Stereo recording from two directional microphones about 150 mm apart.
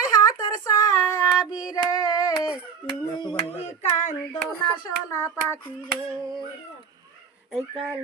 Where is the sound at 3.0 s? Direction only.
30° left (ahead or behind).